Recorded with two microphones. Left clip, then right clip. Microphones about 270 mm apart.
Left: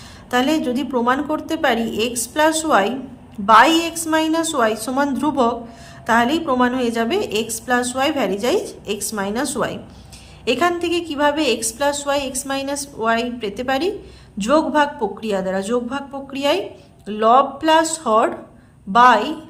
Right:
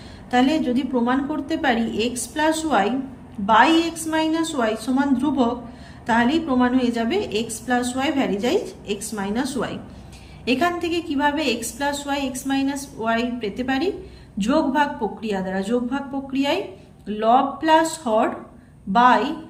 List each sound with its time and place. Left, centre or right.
0.3 s a woman's voice: centre